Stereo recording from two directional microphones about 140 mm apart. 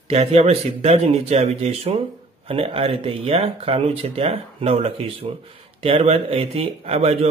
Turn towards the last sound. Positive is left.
turn(degrees=-45)  # may be behind; listen again after turning